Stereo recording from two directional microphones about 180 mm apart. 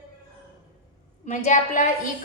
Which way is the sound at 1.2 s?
40° left (ahead or behind).